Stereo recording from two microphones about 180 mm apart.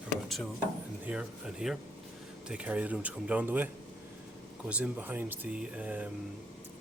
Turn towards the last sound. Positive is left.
turn(degrees=-10)  # may be behind; listen again after turning